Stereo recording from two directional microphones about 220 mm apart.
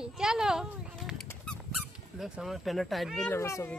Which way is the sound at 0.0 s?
Centre (ahead or behind).